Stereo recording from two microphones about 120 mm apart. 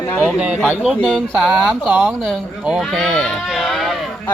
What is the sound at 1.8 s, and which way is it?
Speech, 10° right (ahead or behind).